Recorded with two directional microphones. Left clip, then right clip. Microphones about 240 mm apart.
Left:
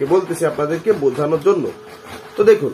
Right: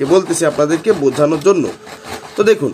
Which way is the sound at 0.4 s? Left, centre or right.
Right.